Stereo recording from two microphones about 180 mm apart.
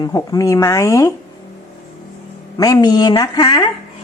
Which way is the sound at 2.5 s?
20° left (ahead or behind).